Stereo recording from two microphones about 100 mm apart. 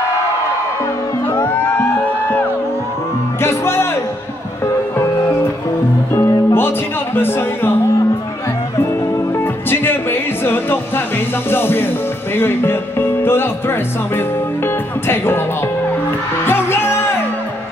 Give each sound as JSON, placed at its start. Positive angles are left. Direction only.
{"t": 3.4, "sound": "music", "side_deg": 25}
{"t": 4.9, "sound": "music", "side_deg": 25}
{"t": 7.2, "sound": "speech", "side_deg": 20}
{"t": 9.4, "sound": "music", "side_deg": 20}
{"t": 11.5, "sound": "speech", "side_deg": 20}
{"t": 16.4, "sound": "music", "side_deg": 25}